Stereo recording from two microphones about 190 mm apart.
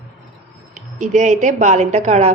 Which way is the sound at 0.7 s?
40° right (ahead or behind).